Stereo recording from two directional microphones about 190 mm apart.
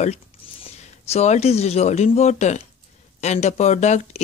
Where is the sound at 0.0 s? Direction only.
35° left (ahead or behind).